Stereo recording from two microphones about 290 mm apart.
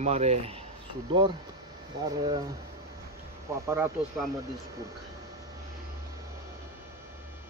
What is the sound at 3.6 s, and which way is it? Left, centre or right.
Speech, centre.